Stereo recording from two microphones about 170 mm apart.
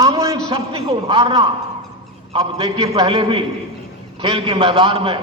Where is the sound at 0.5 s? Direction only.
35° right (ahead or behind).